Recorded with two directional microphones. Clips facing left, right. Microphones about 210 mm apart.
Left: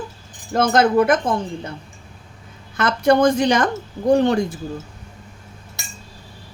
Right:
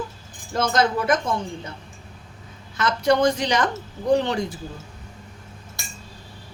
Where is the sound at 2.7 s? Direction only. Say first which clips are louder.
Left 4 dB; 55° left (ahead or behind).